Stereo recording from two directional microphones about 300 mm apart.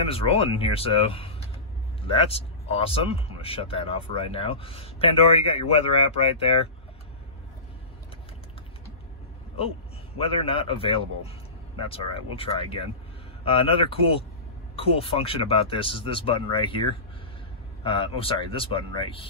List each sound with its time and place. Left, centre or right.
0.0 s speech: centre
10.1 s speech: centre